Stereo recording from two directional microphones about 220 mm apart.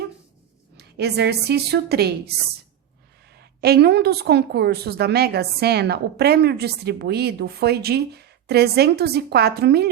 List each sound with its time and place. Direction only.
0.8 s a woman's voice: 50° right (ahead or behind)
3.3 s a woman's voice: 45° right (ahead or behind)